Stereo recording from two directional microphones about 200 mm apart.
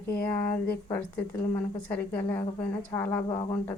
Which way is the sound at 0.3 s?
10° left (ahead or behind).